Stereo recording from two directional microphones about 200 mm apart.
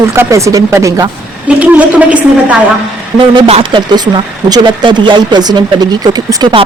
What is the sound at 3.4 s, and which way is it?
Speech, 25° right (ahead or behind).